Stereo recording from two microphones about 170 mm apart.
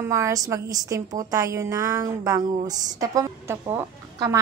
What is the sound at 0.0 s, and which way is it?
A woman's voice, 15° right (ahead or behind).